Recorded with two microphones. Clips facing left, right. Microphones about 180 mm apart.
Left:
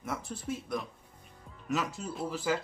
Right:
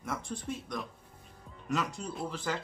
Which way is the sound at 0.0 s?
5° left (ahead or behind).